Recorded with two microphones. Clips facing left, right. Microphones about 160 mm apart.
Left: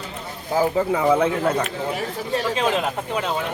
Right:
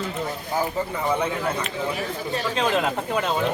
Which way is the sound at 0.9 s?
90° left.